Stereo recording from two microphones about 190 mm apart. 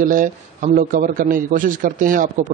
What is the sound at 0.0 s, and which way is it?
A man's voice, 45° right (ahead or behind).